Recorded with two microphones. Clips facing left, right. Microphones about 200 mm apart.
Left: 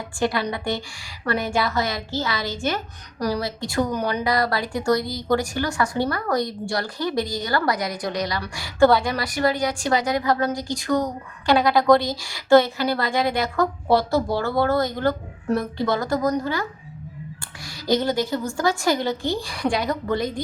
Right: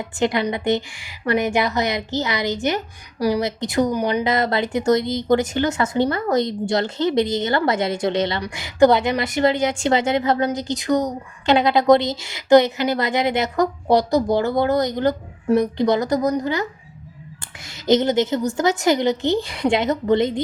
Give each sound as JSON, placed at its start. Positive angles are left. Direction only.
{"t": 0.2, "sound": "a woman's voice", "side_deg": -20}
{"t": 17.8, "sound": "a woman's voice", "side_deg": -20}